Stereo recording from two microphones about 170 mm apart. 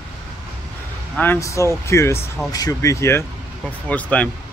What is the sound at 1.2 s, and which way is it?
Speech, 15° left (ahead or behind).